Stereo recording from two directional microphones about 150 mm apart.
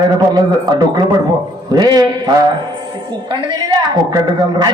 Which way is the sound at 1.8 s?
25° right (ahead or behind).